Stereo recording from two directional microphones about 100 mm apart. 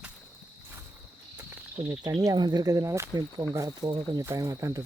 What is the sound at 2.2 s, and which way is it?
Speech, 40° right (ahead or behind).